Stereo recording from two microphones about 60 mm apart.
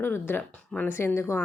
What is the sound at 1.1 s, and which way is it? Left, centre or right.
Speech, left.